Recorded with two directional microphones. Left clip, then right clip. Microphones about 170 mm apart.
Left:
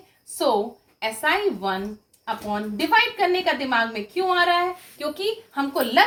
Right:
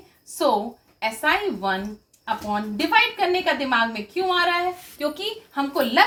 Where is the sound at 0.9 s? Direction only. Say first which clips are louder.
Right 1 dB; 10° left (ahead or behind).